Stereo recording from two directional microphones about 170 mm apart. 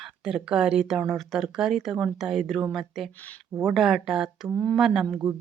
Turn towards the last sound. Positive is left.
turn(degrees=0)  # may be behind; listen again after turning